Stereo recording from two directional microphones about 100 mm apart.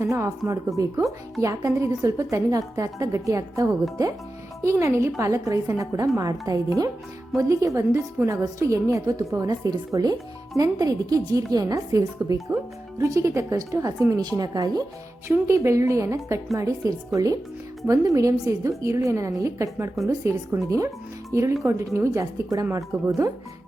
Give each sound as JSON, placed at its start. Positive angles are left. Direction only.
{"t": 0.0, "sound": "a woman's voice", "side_deg": -30}
{"t": 15.3, "sound": "a woman's voice", "side_deg": -30}